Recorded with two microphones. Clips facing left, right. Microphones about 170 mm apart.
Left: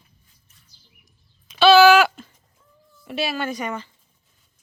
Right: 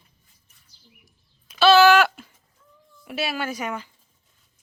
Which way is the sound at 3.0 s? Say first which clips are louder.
Left 2 dB; 5° right (ahead or behind).